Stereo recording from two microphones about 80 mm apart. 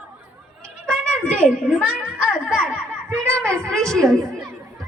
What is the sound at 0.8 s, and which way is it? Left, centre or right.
Cat, centre.